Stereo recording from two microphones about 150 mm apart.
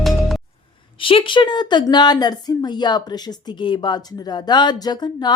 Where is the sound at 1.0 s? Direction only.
35° left (ahead or behind).